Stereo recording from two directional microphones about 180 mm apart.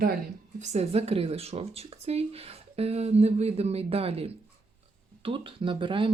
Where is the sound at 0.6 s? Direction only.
40° right (ahead or behind).